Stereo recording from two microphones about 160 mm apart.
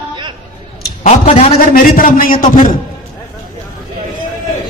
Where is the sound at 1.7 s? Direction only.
60° left (ahead or behind).